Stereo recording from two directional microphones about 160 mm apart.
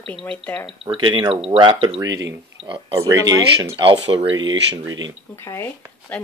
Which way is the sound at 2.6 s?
30° right (ahead or behind).